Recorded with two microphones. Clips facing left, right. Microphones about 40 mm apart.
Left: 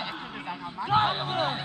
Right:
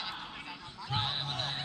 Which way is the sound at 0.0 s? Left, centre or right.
Left.